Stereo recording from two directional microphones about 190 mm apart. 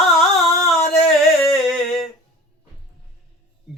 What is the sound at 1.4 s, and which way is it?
Humming, centre (ahead or behind).